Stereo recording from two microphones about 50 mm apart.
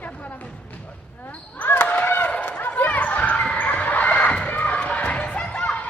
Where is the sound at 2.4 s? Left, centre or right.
Left.